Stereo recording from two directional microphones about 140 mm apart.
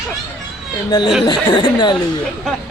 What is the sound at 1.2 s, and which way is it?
Speech, 30° left (ahead or behind).